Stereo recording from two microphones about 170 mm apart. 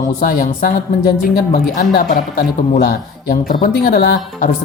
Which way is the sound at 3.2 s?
55° left (ahead or behind).